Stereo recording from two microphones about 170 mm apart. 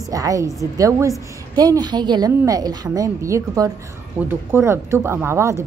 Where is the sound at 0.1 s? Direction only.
20° right (ahead or behind).